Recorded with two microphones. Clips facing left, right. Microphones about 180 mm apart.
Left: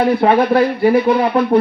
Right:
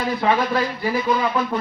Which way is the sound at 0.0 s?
60° left (ahead or behind).